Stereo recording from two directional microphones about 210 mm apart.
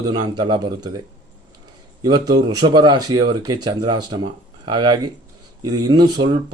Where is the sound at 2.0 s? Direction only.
20° right (ahead or behind).